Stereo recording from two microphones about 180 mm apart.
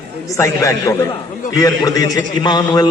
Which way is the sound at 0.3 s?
15° left (ahead or behind).